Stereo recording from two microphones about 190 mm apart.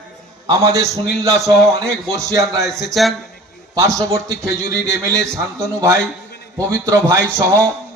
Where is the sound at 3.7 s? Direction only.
15° right (ahead or behind).